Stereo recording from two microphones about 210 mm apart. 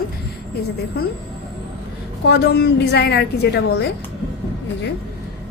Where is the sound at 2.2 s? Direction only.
55° left (ahead or behind).